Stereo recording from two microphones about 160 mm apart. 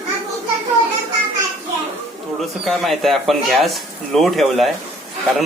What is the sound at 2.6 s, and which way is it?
Speech, centre (ahead or behind).